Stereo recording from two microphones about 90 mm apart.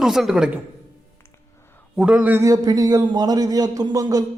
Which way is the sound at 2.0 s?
20° right (ahead or behind).